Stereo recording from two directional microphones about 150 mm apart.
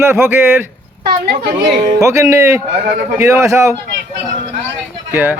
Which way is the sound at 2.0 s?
20° right (ahead or behind).